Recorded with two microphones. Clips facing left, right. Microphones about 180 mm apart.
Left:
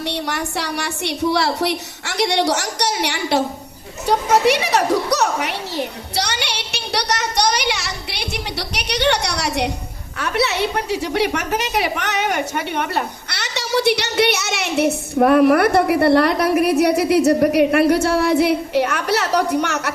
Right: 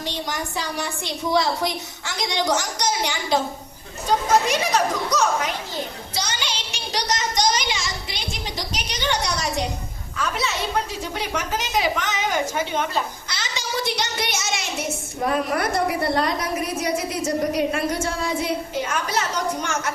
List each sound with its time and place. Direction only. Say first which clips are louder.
0.0 s a woman's voice: left 5 dB; 70° left (ahead or behind)